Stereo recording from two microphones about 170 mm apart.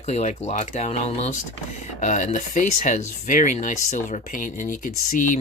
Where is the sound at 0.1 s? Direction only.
40° left (ahead or behind).